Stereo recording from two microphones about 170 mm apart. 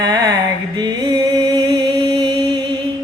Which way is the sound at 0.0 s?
25° right (ahead or behind).